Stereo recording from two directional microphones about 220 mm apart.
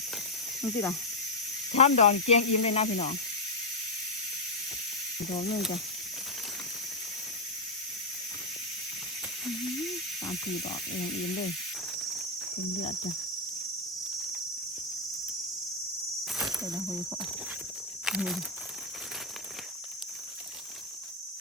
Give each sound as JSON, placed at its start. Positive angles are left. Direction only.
{"t": 0.6, "sound": "speech", "side_deg": 15}
{"t": 1.7, "sound": "speech", "side_deg": 30}
{"t": 18.0, "sound": "speech", "side_deg": -5}